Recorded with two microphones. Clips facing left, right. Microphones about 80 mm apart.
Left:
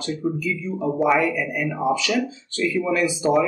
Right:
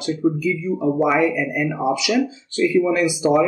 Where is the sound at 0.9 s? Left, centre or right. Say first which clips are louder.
Even; centre.